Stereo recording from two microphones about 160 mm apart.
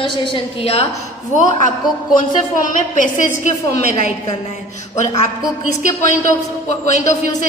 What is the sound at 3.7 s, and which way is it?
Speech, 65° right (ahead or behind).